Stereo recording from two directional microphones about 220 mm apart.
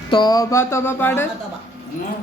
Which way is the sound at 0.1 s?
20° left (ahead or behind).